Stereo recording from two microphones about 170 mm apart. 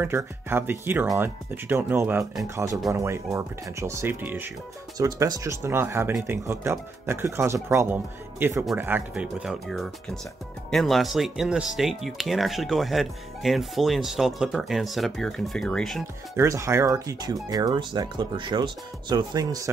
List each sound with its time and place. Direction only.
0.0 s speech: 15° right (ahead or behind); by 16.0 s centre (ahead or behind)
16.3 s speech: 15° right (ahead or behind)